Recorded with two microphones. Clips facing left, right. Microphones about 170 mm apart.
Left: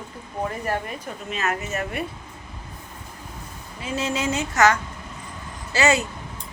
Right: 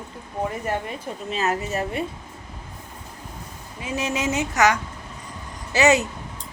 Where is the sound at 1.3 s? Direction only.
35° right (ahead or behind).